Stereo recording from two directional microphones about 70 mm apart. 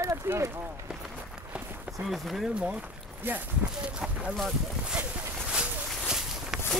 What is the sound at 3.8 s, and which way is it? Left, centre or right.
Speech, centre.